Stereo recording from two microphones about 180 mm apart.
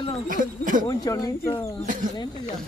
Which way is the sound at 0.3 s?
45° right (ahead or behind).